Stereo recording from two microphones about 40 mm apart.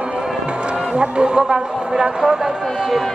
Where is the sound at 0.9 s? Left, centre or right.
Right.